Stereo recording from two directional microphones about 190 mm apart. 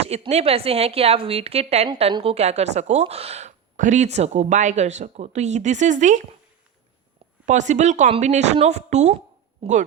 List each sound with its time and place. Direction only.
0.0 s a woman's voice: 35° right (ahead or behind)
7.4 s a woman's voice: 40° right (ahead or behind)